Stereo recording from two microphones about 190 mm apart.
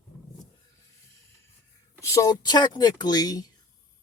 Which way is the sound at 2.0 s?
20° left (ahead or behind).